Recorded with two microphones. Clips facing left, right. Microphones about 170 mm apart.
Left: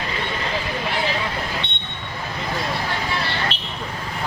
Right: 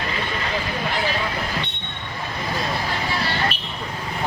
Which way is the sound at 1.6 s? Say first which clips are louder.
Left 1 dB; 30° left (ahead or behind).